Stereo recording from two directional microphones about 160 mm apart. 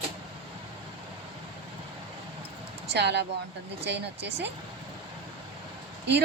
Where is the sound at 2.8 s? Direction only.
90° right.